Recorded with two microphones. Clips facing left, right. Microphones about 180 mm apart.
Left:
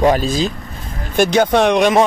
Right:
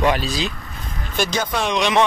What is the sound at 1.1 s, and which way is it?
Speech, 55° left (ahead or behind).